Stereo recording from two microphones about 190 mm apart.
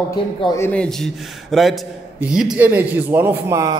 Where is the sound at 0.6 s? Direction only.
5° left (ahead or behind).